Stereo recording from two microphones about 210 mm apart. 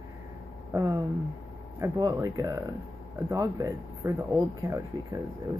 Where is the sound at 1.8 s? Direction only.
15° right (ahead or behind).